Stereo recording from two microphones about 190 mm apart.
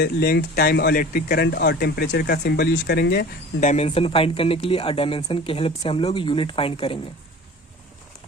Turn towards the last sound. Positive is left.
turn(degrees=30)  # may be behind; listen again after turning